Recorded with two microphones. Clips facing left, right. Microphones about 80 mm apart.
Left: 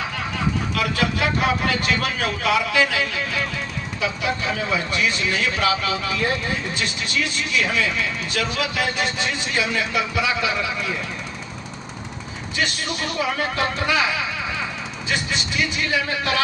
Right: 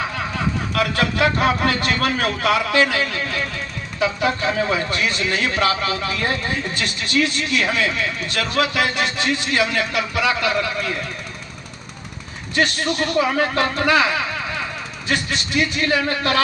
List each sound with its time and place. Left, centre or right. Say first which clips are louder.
0.7 s a man's voice: right 2 dB; right
12.5 s a man's voice: right 6 dB; right